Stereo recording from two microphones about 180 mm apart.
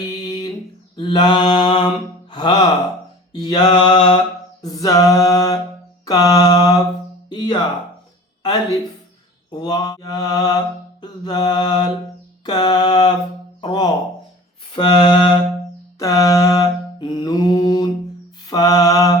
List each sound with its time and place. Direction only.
0.2 s a sound: 20° left (ahead or behind)
0.9 s mantra: 25° left (ahead or behind)
4.6 s a sound: 20° left (ahead or behind)
6.1 s mantra: 20° left (ahead or behind)
7.3 s music: 25° left (ahead or behind)
9.5 s mantra: 25° left (ahead or behind)
13.6 s music: 25° left (ahead or behind)
14.8 s mantra: 25° left (ahead or behind)